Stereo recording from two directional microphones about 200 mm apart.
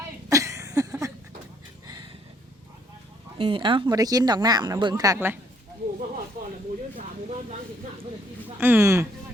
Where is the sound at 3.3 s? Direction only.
25° right (ahead or behind).